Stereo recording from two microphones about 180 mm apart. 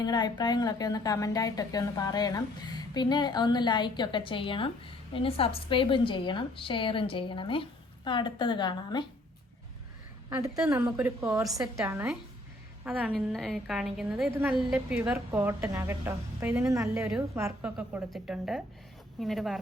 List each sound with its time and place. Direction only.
0.0 s speech: 25° left (ahead or behind)
10.2 s a woman's voice: 15° right (ahead or behind)
17.7 s a woman's voice: 5° right (ahead or behind)